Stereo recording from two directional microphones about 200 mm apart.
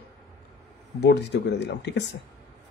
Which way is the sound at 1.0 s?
55° left (ahead or behind).